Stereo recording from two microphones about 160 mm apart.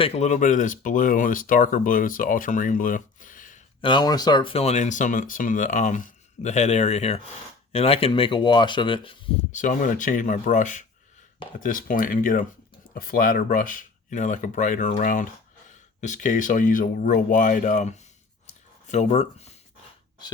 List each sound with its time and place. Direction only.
0.0 s speech: 40° left (ahead or behind)
3.8 s speech: 30° left (ahead or behind)
9.5 s speech: 55° left (ahead or behind)